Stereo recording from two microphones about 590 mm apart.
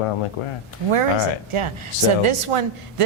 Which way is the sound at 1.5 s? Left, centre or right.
Right.